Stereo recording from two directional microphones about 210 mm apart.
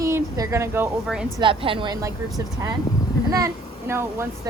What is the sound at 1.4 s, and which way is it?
Speech, 25° right (ahead or behind).